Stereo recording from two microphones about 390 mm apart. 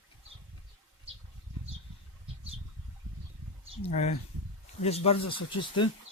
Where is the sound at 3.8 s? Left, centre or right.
Centre.